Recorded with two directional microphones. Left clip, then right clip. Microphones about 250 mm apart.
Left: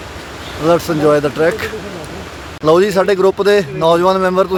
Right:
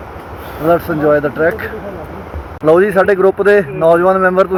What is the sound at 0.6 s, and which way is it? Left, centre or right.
Speech, centre.